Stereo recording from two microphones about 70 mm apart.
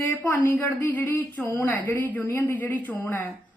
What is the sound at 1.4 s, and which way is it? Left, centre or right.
A woman's voice, left.